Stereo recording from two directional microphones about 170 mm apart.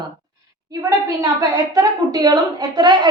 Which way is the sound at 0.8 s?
20° right (ahead or behind).